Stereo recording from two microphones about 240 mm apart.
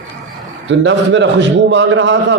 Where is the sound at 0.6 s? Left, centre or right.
Right.